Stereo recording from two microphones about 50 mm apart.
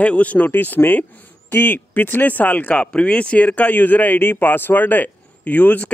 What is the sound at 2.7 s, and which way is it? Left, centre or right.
Speech, left.